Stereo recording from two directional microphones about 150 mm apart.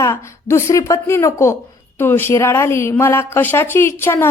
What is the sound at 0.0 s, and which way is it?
A woman's voice, 20° left (ahead or behind).